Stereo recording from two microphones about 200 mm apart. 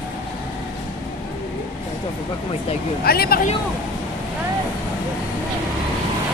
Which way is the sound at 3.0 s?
50° left (ahead or behind).